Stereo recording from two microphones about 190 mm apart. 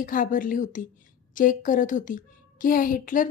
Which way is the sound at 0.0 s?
45° left (ahead or behind).